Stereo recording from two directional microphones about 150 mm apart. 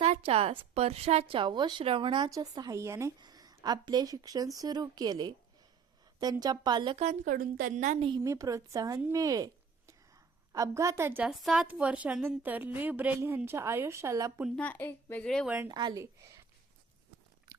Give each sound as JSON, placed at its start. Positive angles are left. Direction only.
{"t": 0.0, "sound": "a woman's voice", "side_deg": -45}
{"t": 6.4, "sound": "a woman's voice", "side_deg": -25}
{"t": 7.0, "sound": "speech", "side_deg": -60}
{"t": 8.2, "sound": "a woman's voice", "side_deg": -20}
{"t": 11.3, "sound": "a woman's voice", "side_deg": -5}
{"t": 14.5, "sound": "a woman's voice", "side_deg": 10}
{"t": 15.4, "sound": "a woman's voice", "side_deg": -15}
{"t": 15.7, "sound": "a woman's voice", "side_deg": -30}